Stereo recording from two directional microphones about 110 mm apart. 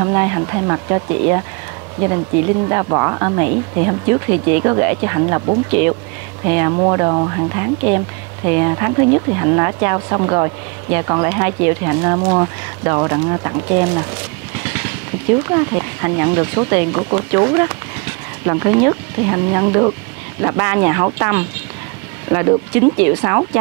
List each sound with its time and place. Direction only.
0.0 s speech: 25° right (ahead or behind)
14.6 s vehicle: 20° right (ahead or behind)
15.3 s speech: 25° right (ahead or behind)